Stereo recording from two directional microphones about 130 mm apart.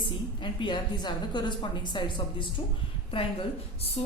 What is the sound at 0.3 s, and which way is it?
A woman's voice, 40° left (ahead or behind).